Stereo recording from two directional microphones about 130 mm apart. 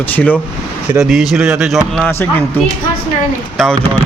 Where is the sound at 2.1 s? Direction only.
20° left (ahead or behind).